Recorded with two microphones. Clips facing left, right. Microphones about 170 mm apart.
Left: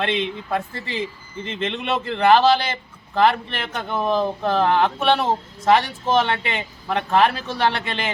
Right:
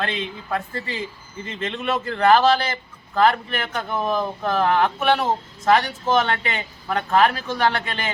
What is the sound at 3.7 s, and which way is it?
Speech, 30° left (ahead or behind).